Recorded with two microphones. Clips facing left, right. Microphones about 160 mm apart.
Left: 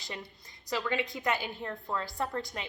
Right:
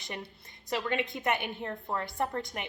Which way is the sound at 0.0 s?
20° right (ahead or behind).